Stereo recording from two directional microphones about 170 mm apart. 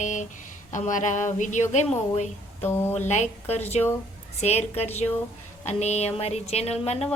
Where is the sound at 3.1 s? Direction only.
40° left (ahead or behind).